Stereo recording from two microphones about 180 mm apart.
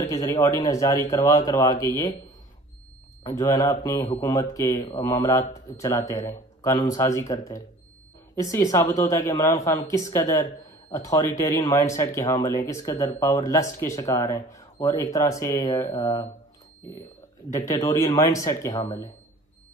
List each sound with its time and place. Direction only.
0.0 s a man's voice: 20° left (ahead or behind)
3.3 s a man's voice: 20° left (ahead or behind)
17.5 s a man's voice: 15° left (ahead or behind)